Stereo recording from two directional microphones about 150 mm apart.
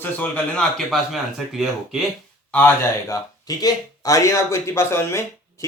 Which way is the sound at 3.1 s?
20° left (ahead or behind).